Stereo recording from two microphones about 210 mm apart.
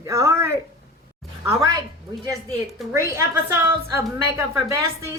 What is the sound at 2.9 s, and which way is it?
Speech, 15° right (ahead or behind).